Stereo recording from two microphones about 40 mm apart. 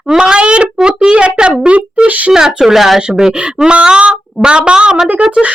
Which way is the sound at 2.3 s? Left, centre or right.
Centre.